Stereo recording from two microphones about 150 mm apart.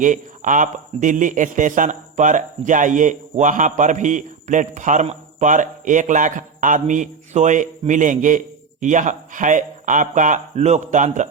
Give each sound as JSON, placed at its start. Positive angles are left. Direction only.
{"t": 0.0, "sound": "speech", "side_deg": -60}